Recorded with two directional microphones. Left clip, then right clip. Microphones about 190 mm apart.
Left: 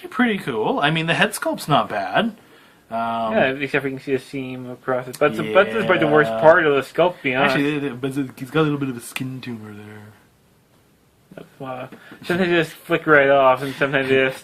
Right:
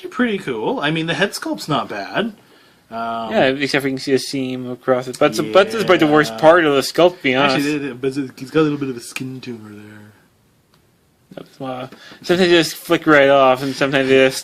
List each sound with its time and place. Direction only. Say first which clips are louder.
0.1 s speech: even; 35° left (ahead or behind)
3.3 s speech: right 5 dB; 60° right (ahead or behind)
7.4 s speech: right 2 dB; 35° left (ahead or behind)
11.3 s speech: right 4 dB; 60° right (ahead or behind)